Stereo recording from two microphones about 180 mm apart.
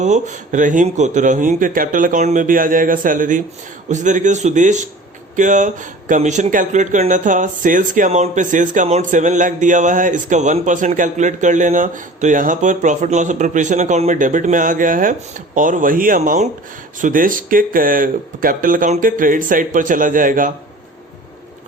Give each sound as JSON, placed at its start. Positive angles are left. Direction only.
{"t": 0.0, "sound": "speech", "side_deg": -45}